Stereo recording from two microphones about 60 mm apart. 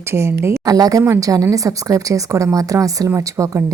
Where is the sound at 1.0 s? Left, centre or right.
Right.